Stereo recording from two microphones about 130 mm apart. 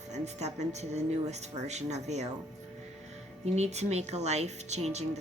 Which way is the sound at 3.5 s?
60° right (ahead or behind).